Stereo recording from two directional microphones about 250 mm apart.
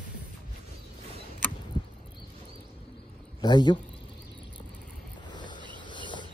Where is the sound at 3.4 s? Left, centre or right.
Centre.